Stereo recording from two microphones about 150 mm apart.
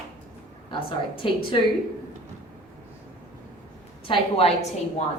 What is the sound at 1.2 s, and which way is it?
Speech, 35° left (ahead or behind).